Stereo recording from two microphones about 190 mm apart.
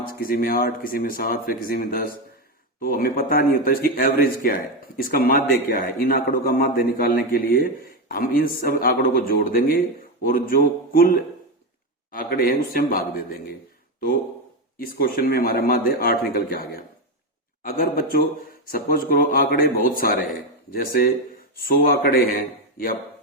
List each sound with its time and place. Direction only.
0.2 s speech: 50° left (ahead or behind)
14.8 s speech: 50° left (ahead or behind)